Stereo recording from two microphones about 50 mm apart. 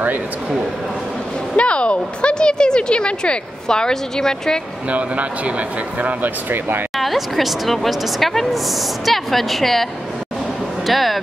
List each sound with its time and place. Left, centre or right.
1.6 s speech: left
4.8 s speech: right
7.0 s a woman's voice: centre
10.9 s a woman's voice: centre